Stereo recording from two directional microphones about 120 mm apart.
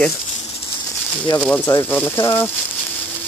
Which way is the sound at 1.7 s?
15° left (ahead or behind).